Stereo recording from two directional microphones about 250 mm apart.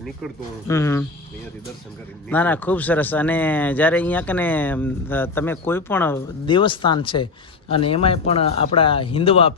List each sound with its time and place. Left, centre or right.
0.7 s speech: centre
2.3 s speech: centre
6.4 s speech: centre